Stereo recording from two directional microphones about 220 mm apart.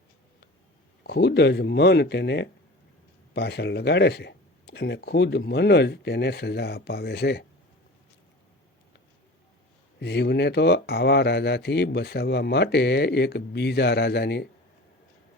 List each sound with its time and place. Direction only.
1.0 s speech: 50° left (ahead or behind)
10.0 s speech: 50° left (ahead or behind)